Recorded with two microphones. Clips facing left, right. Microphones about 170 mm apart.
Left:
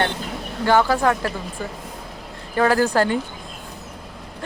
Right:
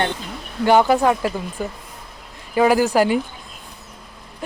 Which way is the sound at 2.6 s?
15° right (ahead or behind).